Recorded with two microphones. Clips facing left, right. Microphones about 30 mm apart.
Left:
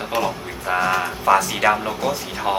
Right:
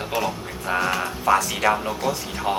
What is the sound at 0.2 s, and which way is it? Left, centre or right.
Speech, centre.